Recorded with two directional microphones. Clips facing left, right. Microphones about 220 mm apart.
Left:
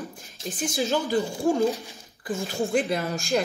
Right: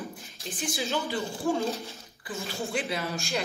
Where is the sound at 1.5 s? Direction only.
15° left (ahead or behind).